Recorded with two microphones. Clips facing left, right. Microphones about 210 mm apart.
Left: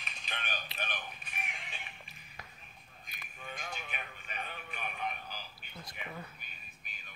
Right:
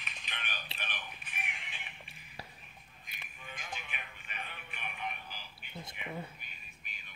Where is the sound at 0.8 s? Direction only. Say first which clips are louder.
Left 4 dB; 40° left (ahead or behind).